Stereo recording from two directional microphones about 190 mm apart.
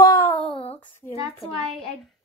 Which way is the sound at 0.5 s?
30° left (ahead or behind).